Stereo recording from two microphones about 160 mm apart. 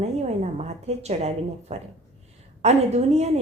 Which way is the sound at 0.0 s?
40° right (ahead or behind).